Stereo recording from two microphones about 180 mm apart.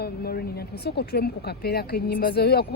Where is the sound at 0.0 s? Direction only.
60° left (ahead or behind).